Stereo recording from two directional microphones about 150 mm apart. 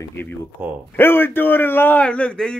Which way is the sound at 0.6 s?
15° right (ahead or behind).